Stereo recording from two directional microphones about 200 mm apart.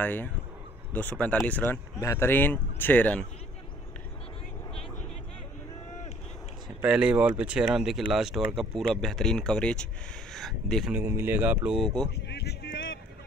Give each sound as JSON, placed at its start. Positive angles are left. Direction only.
{"t": 0.0, "sound": "speech", "side_deg": 10}
{"t": 6.8, "sound": "speech", "side_deg": -5}
{"t": 11.0, "sound": "speech", "side_deg": -10}
{"t": 12.3, "sound": "a sound", "side_deg": 55}